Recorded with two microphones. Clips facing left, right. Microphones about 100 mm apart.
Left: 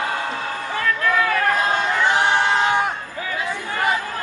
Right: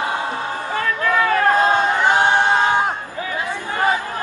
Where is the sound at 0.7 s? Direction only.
30° right (ahead or behind).